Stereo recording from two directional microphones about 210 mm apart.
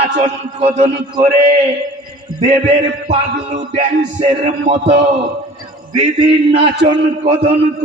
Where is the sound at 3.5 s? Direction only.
30° right (ahead or behind).